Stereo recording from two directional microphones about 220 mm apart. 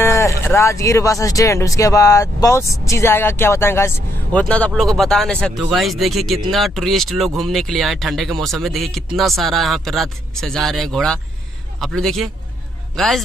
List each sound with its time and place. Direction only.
0.0 s a man's voice: 15° left (ahead or behind)